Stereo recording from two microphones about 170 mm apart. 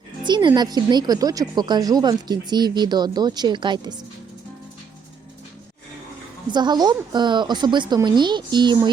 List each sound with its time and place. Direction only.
0.3 s a woman's voice: 25° right (ahead or behind)
6.5 s a woman's voice: 25° right (ahead or behind)